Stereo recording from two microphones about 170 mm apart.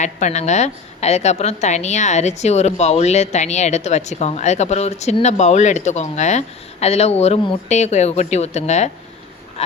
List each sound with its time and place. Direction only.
0.0 s a woman's voice: 45° left (ahead or behind)